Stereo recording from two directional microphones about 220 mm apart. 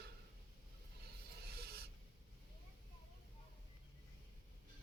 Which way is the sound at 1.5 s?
45° right (ahead or behind).